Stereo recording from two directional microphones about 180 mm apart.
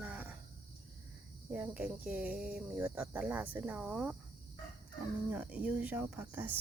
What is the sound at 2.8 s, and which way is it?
Speech, 15° right (ahead or behind).